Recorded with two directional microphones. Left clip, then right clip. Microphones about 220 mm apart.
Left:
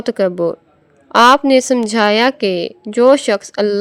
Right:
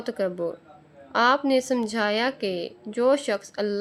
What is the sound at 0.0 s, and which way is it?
A woman's voice, 35° left (ahead or behind).